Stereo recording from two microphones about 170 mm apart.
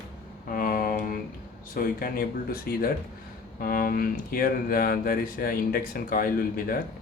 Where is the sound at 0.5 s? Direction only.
55° left (ahead or behind).